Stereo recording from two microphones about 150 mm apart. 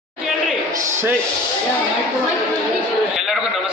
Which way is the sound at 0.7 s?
20° right (ahead or behind).